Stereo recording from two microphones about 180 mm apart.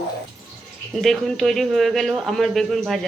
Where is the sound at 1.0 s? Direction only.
Centre (ahead or behind).